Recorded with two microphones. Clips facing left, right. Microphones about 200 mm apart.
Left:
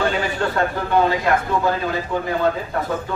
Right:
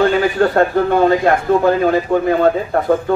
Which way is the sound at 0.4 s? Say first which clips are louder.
Right 10 dB; 50° right (ahead or behind).